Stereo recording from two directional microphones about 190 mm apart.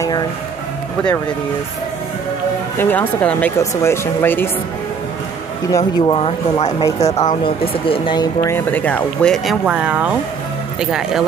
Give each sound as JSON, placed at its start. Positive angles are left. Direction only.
{"t": 2.8, "sound": "speech", "side_deg": 10}
{"t": 5.7, "sound": "speech", "side_deg": 20}
{"t": 6.8, "sound": "speech", "side_deg": 20}
{"t": 7.4, "sound": "speech", "side_deg": 30}